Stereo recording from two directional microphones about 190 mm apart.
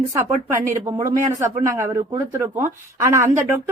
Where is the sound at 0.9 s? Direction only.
15° right (ahead or behind).